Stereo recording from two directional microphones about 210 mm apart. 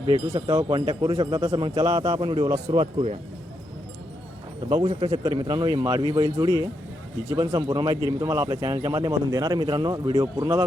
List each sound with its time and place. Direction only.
0.0 s speech: 25° right (ahead or behind)
4.7 s a man's voice: 25° right (ahead or behind)